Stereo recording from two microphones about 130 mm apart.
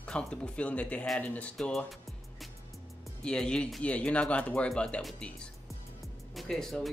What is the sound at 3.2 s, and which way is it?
Speech, 5° left (ahead or behind).